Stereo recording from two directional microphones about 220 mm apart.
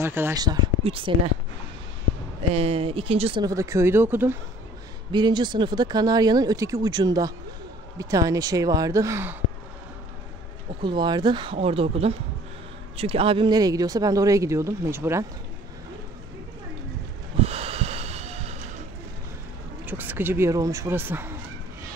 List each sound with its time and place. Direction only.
0.0 s speech: 10° right (ahead or behind)
2.5 s speech: 25° right (ahead or behind); by 4.4 s 10° right (ahead or behind)
5.1 s speech: 20° right (ahead or behind)
10.8 s speech: 20° right (ahead or behind)
17.4 s snort: 25° right (ahead or behind)
19.9 s speech: 10° right (ahead or behind)